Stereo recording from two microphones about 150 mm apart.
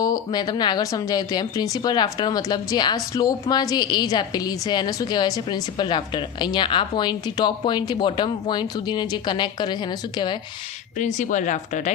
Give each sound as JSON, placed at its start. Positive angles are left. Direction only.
{"t": 0.0, "sound": "a woman's voice", "side_deg": 25}
{"t": 10.9, "sound": "speech", "side_deg": 55}